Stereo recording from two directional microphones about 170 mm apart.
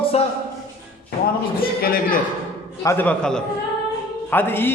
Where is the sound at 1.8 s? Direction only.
60° left (ahead or behind).